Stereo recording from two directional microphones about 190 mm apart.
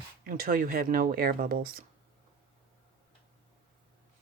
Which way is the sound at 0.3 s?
50° right (ahead or behind).